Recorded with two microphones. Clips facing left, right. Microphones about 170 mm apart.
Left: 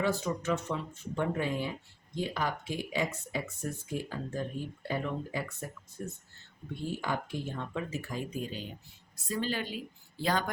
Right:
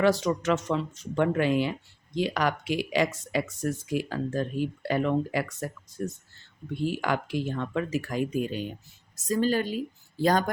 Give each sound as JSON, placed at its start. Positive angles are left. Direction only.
{"t": 0.0, "sound": "speech", "side_deg": -90}
{"t": 6.7, "sound": "speech", "side_deg": -80}
{"t": 9.1, "sound": "a woman's voice", "side_deg": -40}